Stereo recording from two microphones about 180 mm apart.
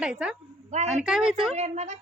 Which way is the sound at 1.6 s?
40° right (ahead or behind).